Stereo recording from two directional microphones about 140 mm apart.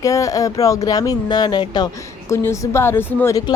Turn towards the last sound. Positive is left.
turn(degrees=25)  # may be behind; listen again after turning